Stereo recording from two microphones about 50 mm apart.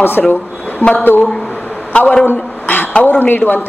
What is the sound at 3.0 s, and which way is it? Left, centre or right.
Speech, left.